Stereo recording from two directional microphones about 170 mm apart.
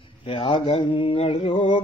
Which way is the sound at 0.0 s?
30° left (ahead or behind).